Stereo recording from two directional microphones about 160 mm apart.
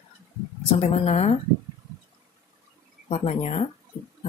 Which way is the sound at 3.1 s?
40° left (ahead or behind).